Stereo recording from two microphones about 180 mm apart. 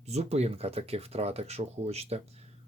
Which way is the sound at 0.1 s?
35° right (ahead or behind).